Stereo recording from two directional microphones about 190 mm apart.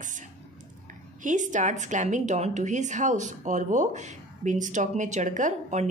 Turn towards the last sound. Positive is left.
turn(degrees=-40)  # may be behind; listen again after turning